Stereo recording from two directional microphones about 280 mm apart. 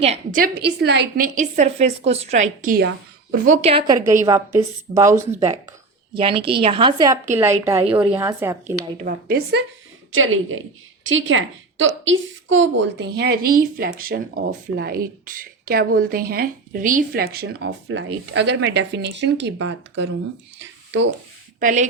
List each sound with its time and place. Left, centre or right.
0.0 s a woman's voice: right; by 8.7 s centre
9.0 s a woman's voice: right
10.1 s a woman's voice: right
20.6 s a sound: right
21.6 s a woman's voice: right